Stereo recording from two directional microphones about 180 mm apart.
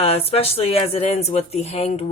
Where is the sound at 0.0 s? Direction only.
35° left (ahead or behind).